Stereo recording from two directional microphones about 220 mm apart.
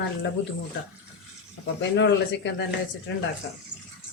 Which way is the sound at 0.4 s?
60° left (ahead or behind).